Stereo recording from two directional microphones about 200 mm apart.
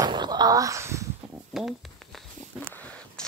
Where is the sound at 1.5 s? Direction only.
Centre (ahead or behind).